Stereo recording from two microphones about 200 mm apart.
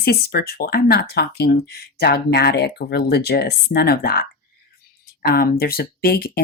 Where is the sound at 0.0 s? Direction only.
50° left (ahead or behind).